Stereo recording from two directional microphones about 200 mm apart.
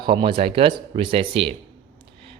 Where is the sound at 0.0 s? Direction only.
25° right (ahead or behind).